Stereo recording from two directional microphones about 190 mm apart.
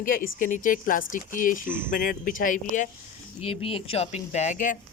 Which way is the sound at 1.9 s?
45° left (ahead or behind).